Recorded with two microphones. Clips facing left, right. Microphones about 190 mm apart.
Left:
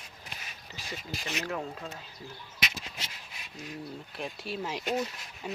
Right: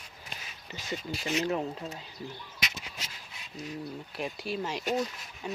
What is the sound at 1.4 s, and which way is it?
Speech, 20° right (ahead or behind).